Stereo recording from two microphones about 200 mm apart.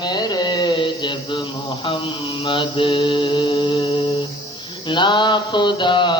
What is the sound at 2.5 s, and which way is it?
Mantra, 25° left (ahead or behind).